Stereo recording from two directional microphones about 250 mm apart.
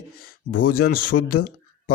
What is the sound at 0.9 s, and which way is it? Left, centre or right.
Speech, left.